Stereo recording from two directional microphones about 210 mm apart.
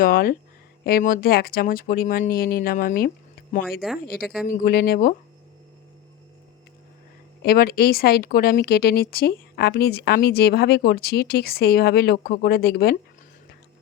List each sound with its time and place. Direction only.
0.0 s speech: 45° left (ahead or behind)
3.7 s a woman's voice: centre (ahead or behind)
4.4 s speech: 40° left (ahead or behind)
7.4 s speech: 45° left (ahead or behind)